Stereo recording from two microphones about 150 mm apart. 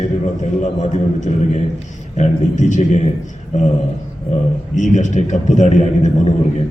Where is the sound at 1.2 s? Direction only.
55° left (ahead or behind).